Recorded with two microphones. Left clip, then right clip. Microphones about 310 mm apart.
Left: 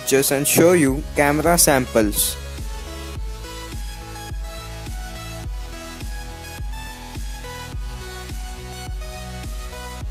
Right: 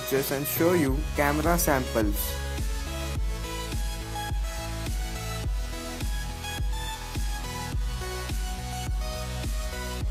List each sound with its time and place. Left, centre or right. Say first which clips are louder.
0.1 s speech: left 11 dB; left